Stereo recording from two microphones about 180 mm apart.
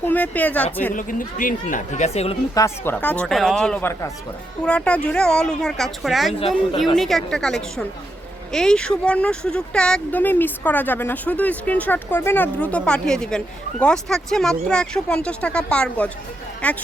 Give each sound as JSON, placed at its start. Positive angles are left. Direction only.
{"t": 0.0, "sound": "speech", "side_deg": 10}
{"t": 0.9, "sound": "speech", "side_deg": 50}
{"t": 2.6, "sound": "speech", "side_deg": 15}